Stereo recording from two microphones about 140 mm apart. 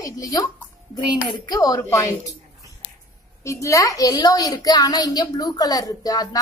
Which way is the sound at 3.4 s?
20° left (ahead or behind).